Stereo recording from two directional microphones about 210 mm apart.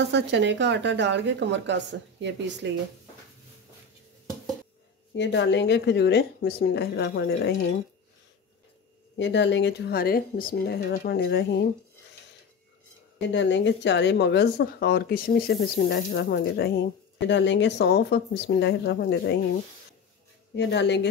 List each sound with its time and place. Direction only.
0.1 s a woman's voice: 60° right (ahead or behind)
5.1 s speech: 55° left (ahead or behind)
9.1 s speech: 55° left (ahead or behind)
13.3 s speech: 60° left (ahead or behind)
20.5 s speech: 55° left (ahead or behind)